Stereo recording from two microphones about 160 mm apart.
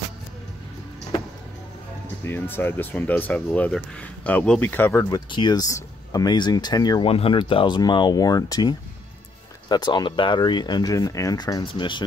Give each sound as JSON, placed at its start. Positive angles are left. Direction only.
{"t": 2.2, "sound": "speech", "side_deg": 15}
{"t": 5.1, "sound": "speech", "side_deg": 25}
{"t": 7.1, "sound": "speech", "side_deg": 35}